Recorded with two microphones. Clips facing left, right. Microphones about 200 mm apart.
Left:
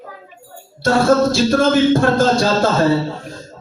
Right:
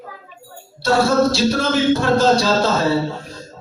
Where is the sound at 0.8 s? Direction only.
50° left (ahead or behind).